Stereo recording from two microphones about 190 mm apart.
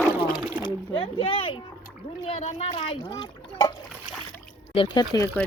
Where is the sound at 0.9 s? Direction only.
25° left (ahead or behind).